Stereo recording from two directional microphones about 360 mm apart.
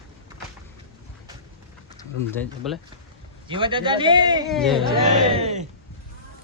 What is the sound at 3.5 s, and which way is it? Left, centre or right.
Speech, centre.